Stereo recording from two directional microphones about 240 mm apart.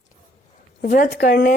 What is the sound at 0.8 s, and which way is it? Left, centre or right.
Speech, left.